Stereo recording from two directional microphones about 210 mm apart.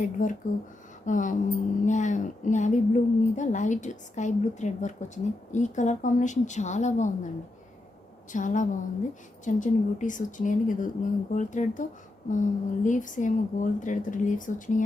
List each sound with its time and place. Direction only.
0.0 s speech: 40° left (ahead or behind)
8.3 s speech: 35° left (ahead or behind)